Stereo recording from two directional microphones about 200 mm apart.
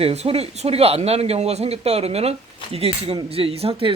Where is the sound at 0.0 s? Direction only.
30° right (ahead or behind).